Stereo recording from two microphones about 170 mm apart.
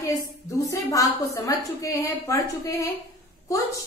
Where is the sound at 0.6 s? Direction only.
20° left (ahead or behind).